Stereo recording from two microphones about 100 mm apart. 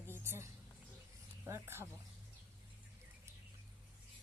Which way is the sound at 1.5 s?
25° right (ahead or behind).